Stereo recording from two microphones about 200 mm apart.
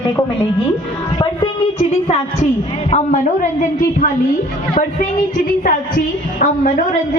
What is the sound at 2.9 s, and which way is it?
A man's voice, 40° left (ahead or behind).